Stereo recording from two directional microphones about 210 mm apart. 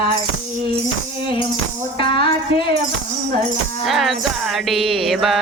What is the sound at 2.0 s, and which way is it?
Music, 25° left (ahead or behind).